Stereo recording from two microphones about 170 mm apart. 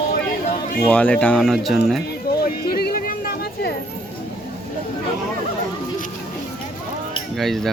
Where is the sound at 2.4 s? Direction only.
65° left (ahead or behind).